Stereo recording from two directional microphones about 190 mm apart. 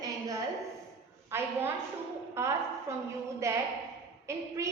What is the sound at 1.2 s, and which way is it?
A woman's voice, 10° right (ahead or behind).